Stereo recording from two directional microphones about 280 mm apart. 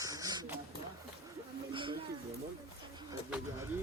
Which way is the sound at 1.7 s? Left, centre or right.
Centre.